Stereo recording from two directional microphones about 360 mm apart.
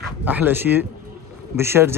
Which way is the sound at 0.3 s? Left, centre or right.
Centre.